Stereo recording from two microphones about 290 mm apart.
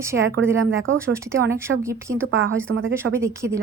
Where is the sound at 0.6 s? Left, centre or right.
Right.